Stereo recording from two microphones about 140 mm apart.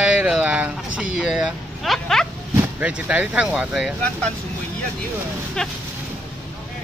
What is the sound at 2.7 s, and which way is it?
Speech, 10° right (ahead or behind).